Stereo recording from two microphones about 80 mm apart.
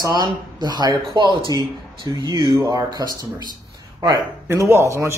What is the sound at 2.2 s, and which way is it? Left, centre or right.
Speech, right.